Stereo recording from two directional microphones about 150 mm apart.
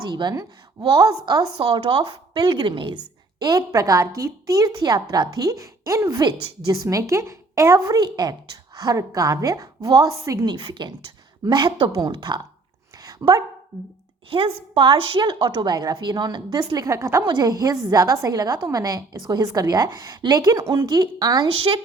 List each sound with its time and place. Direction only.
0.1 s a woman's voice: 30° right (ahead or behind)
13.1 s dog: 25° right (ahead or behind)
14.3 s a woman's voice: 35° right (ahead or behind)